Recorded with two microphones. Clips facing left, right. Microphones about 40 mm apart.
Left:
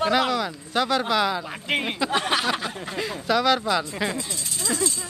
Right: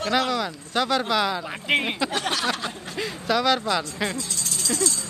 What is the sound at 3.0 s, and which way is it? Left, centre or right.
Speech, centre.